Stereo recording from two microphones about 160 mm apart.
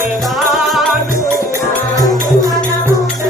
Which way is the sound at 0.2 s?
Centre (ahead or behind).